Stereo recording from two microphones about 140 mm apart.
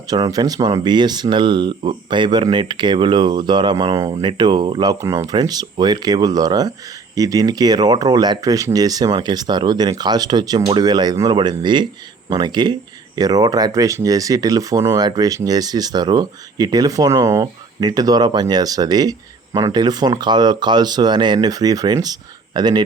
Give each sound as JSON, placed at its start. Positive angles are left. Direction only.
{"t": 0.1, "sound": "speech", "side_deg": -30}